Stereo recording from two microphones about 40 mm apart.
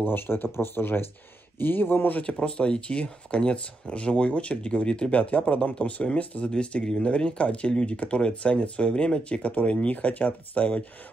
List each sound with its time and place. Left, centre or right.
0.0 s speech: left
1.6 s speech: left
2.3 s speech: left